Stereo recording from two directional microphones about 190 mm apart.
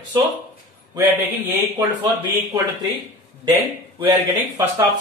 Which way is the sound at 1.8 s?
15° right (ahead or behind).